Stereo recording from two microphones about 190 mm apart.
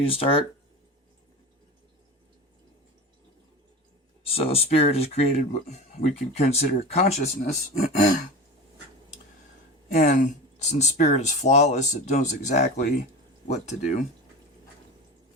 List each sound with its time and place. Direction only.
0.0 s speech: 30° left (ahead or behind)
4.2 s speech: 30° left (ahead or behind)
9.9 s speech: 40° left (ahead or behind)